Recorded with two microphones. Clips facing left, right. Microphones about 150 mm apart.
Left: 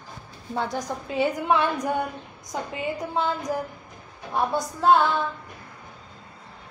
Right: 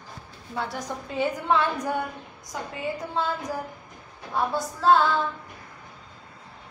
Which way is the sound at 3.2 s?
15° left (ahead or behind).